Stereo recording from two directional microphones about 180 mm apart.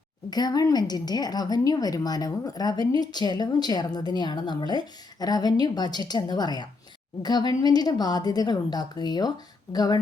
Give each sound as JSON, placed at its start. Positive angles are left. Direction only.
{"t": 0.3, "sound": "a woman's voice", "side_deg": 20}